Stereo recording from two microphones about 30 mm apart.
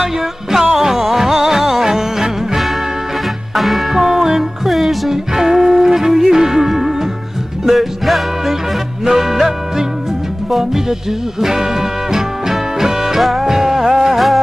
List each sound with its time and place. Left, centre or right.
0.0 s music: centre
3.5 s music: centre
3.9 s music: centre
4.6 s music: centre
5.3 s music: centre
7.6 s music: centre
9.0 s music: centre
13.2 s music: centre
13.5 s music: centre
14.1 s music: centre